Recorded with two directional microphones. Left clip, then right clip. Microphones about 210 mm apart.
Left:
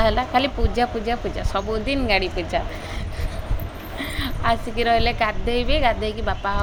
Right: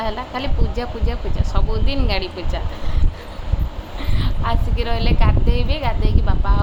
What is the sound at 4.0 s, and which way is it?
Speech, 15° left (ahead or behind).